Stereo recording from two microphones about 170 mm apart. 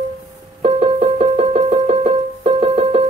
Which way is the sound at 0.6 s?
35° right (ahead or behind).